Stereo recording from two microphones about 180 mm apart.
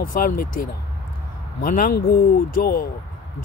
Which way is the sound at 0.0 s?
50° left (ahead or behind).